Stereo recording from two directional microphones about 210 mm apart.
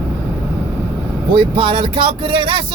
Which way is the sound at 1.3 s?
25° right (ahead or behind).